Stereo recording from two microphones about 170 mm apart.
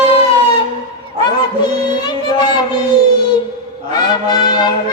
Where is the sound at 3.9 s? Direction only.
25° left (ahead or behind).